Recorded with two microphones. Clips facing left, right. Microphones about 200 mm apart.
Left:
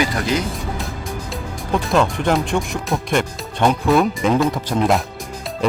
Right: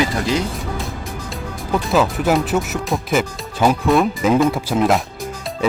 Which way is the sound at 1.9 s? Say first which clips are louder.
Right 1 dB; 5° right (ahead or behind).